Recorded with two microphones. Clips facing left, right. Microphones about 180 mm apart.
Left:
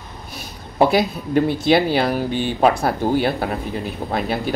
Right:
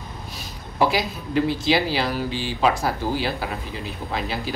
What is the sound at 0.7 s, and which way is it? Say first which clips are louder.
Speech: left 5 dB; 60° left (ahead or behind).